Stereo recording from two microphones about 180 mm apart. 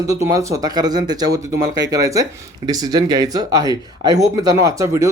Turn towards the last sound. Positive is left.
turn(degrees=-20)  # may be behind; listen again after turning